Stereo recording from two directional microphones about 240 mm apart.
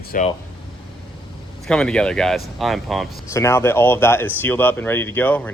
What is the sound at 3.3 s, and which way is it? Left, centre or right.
Speech, centre.